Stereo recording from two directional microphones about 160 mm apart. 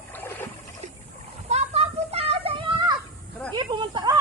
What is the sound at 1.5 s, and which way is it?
Children playing, 40° right (ahead or behind).